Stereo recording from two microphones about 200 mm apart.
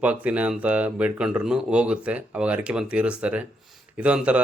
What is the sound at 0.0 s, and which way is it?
Speech, 5° right (ahead or behind).